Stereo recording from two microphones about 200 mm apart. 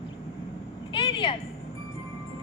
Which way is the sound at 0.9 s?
25° left (ahead or behind).